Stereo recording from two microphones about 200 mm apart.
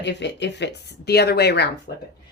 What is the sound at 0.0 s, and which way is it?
Speech, 60° left (ahead or behind).